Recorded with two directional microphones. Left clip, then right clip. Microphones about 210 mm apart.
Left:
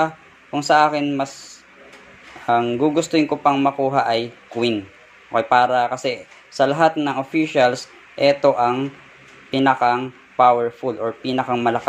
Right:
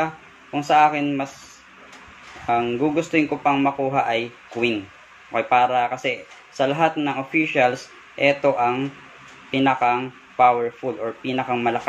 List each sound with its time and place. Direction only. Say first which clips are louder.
0.0 s speech: left 4 dB; 35° left (ahead or behind)
2.4 s speech: left 3 dB; 35° left (ahead or behind)
10.6 s speech: left 3 dB; 20° left (ahead or behind)
11.2 s speech: left 2 dB; 35° left (ahead or behind)